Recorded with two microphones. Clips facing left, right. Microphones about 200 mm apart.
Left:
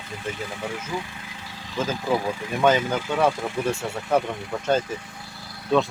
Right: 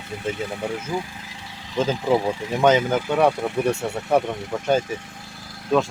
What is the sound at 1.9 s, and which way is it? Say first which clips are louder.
Speech: right 4 dB; 25° right (ahead or behind).